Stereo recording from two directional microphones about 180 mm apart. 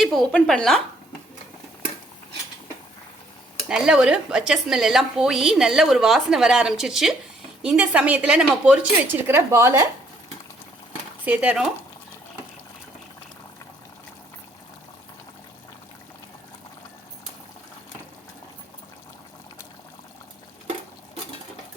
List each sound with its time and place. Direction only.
0.0 s speech: centre (ahead or behind)
3.7 s a woman's voice: 5° right (ahead or behind)
11.3 s a woman's voice: 10° right (ahead or behind)